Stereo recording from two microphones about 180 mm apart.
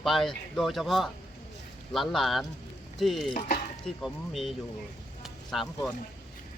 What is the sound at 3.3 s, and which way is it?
Chopping, 45° left (ahead or behind).